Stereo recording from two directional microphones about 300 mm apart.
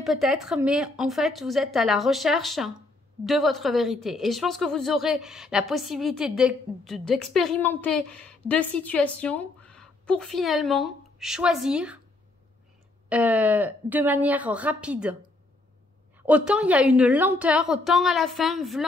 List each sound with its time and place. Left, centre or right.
0.0 s a woman's voice: centre
13.1 s a woman's voice: centre
16.2 s a woman's voice: centre